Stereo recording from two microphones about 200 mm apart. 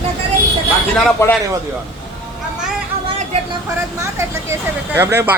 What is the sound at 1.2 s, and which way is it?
Speech, 15° left (ahead or behind).